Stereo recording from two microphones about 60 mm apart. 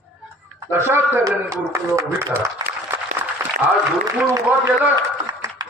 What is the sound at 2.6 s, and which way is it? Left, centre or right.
Applause, right.